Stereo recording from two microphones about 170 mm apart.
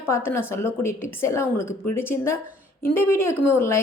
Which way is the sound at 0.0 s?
15° left (ahead or behind).